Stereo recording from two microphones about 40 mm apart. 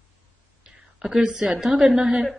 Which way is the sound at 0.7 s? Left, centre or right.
Centre.